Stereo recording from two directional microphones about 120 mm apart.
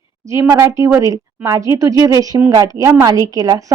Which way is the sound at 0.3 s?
25° right (ahead or behind).